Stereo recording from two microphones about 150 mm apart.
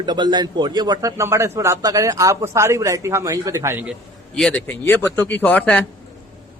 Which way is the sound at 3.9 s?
5° left (ahead or behind).